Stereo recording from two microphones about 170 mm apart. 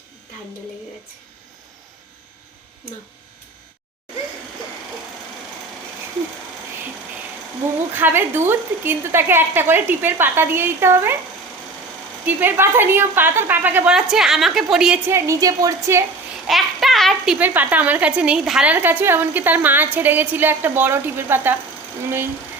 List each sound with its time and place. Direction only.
7.9 s a child's voice: 10° right (ahead or behind)
12.2 s a child's voice: 10° right (ahead or behind)
15.1 s a child's voice: 20° right (ahead or behind)
16.5 s a child's voice: centre (ahead or behind)